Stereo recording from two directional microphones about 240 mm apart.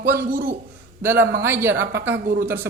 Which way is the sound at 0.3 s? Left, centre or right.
Right.